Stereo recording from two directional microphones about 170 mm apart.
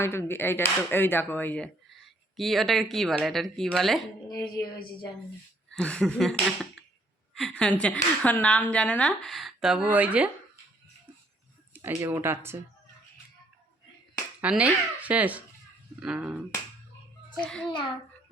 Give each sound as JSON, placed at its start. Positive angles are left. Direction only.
{"t": 0.0, "sound": "speech", "side_deg": 15}
{"t": 4.3, "sound": "speech", "side_deg": 20}
{"t": 5.7, "sound": "a woman's voice", "side_deg": 5}
{"t": 11.7, "sound": "speech", "side_deg": -15}
{"t": 14.4, "sound": "speech", "side_deg": -5}
{"t": 17.4, "sound": "speech", "side_deg": 5}